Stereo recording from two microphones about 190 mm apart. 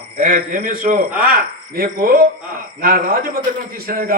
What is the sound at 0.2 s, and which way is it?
A man's voice, 45° right (ahead or behind).